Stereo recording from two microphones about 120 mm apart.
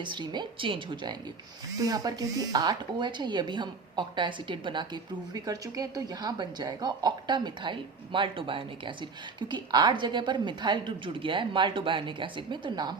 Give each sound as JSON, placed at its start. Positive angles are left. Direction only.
{"t": 0.0, "sound": "a woman's voice", "side_deg": -40}
{"t": 5.3, "sound": "a woman's voice", "side_deg": -30}